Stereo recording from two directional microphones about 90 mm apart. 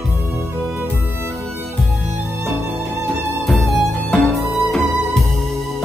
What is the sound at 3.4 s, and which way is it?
Music, centre (ahead or behind).